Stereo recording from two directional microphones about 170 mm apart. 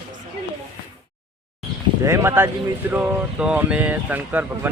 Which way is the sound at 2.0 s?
15° right (ahead or behind).